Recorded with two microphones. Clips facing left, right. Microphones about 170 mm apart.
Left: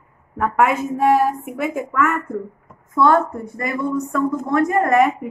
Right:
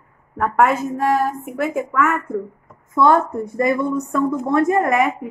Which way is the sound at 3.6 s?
25° right (ahead or behind).